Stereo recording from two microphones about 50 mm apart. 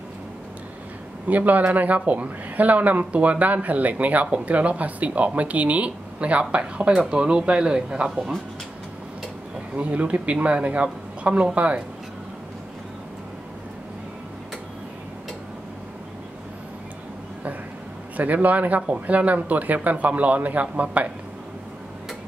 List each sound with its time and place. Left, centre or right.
1.2 s speech: right; by 8.2 s centre
9.8 s speech: right
18.1 s speech: right